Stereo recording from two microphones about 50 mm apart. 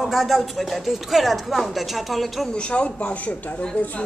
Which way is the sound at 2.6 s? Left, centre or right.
Left.